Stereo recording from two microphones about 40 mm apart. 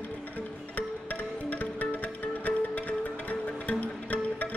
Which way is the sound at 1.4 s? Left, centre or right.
Left.